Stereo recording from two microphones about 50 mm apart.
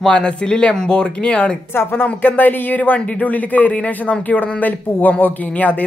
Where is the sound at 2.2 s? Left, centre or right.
Left.